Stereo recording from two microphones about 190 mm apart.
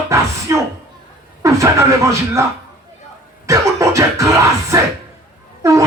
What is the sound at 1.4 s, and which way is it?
Speech, 15° right (ahead or behind).